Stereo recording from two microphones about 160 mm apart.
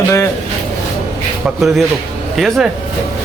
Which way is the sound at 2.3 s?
Centre (ahead or behind).